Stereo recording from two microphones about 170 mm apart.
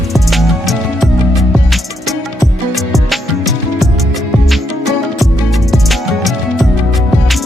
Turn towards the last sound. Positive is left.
turn(degrees=0)  # may be behind; listen again after turning